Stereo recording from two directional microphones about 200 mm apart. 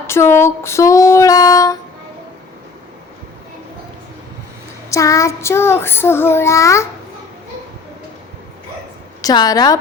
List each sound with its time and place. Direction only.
0.1 s child singing: 15° left (ahead or behind)
4.9 s child singing: 15° left (ahead or behind)
9.2 s a woman's voice: 20° left (ahead or behind)